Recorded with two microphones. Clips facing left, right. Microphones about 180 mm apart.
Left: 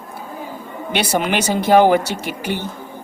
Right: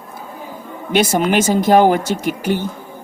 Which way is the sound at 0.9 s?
45° right (ahead or behind).